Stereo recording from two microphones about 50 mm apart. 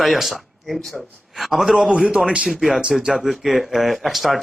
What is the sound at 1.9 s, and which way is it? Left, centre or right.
A man's voice, centre.